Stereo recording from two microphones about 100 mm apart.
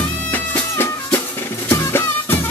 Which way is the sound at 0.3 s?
20° left (ahead or behind).